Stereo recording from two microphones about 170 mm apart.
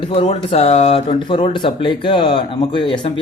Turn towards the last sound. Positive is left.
turn(degrees=30)  # may be behind; listen again after turning